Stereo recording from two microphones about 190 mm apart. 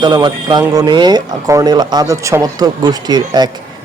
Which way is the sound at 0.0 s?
20° right (ahead or behind).